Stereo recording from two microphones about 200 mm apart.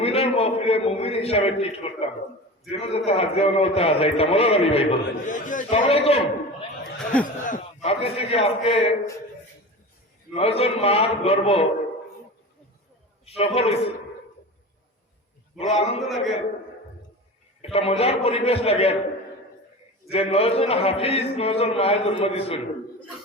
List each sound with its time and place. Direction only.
0.0 s a man's voice: 30° left (ahead or behind)
5.8 s a man's voice: 30° left (ahead or behind)
7.0 s speech: 5° left (ahead or behind)
7.4 s a man's voice: 40° left (ahead or behind)
10.3 s a man's voice: 30° left (ahead or behind)
13.2 s a man's voice: 30° left (ahead or behind)
15.5 s a man's voice: 30° left (ahead or behind)
16.0 s a man's voice: centre (ahead or behind)
17.6 s a man's voice: 30° left (ahead or behind)
20.1 s a man's voice: 30° left (ahead or behind)